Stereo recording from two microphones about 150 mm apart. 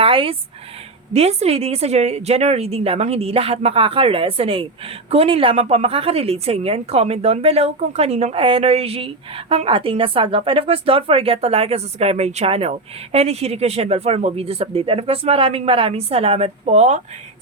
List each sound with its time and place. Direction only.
0.0 s speech: 35° right (ahead or behind)